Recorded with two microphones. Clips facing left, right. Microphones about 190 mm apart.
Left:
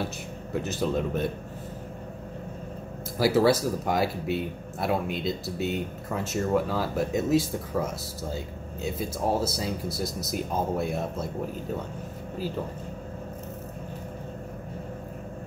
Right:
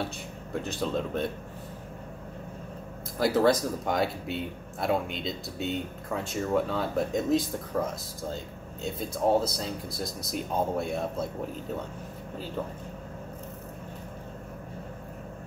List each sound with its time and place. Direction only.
0.0 s speech: 5° left (ahead or behind)
3.2 s speech: 5° left (ahead or behind)